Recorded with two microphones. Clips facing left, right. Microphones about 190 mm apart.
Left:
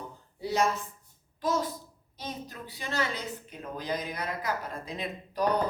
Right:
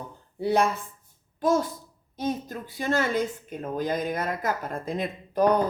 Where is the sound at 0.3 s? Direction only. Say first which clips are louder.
Right 4 dB; 55° right (ahead or behind).